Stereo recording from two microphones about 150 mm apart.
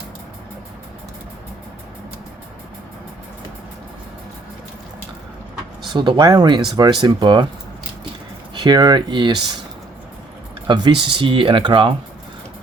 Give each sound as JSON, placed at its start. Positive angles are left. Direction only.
{"t": 5.9, "sound": "speech", "side_deg": -30}
{"t": 8.5, "sound": "speech", "side_deg": -30}
{"t": 10.7, "sound": "speech", "side_deg": -30}